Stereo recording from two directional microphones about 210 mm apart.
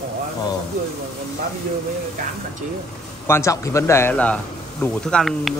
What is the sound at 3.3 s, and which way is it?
Speech, 15° left (ahead or behind).